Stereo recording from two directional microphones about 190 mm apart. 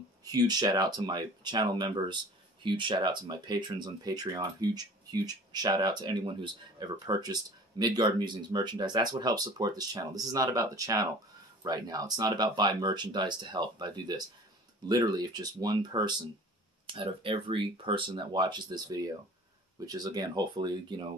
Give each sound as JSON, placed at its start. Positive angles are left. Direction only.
{"t": 0.2, "sound": "speech", "side_deg": -20}